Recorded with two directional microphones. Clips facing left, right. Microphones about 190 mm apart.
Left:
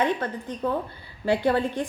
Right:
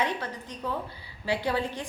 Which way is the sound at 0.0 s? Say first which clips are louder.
Left 5 dB; 55° left (ahead or behind).